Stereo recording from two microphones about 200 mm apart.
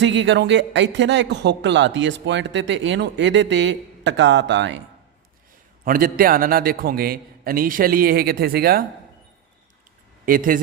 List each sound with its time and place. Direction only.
0.0 s speech: 65° right (ahead or behind)
5.8 s a man's voice: 45° right (ahead or behind)
10.2 s a man's voice: 45° right (ahead or behind)